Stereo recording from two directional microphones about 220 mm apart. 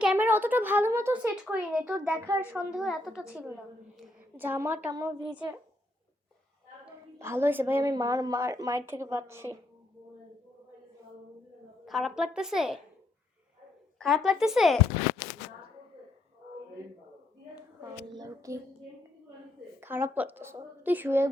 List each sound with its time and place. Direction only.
0.0 s a woman's voice: 5° right (ahead or behind)
6.8 s a woman's voice: 10° right (ahead or behind)
11.9 s a woman's voice: centre (ahead or behind)
14.0 s a woman's voice: centre (ahead or behind)
18.1 s child singing: 15° right (ahead or behind)
19.8 s a woman's voice: 10° right (ahead or behind)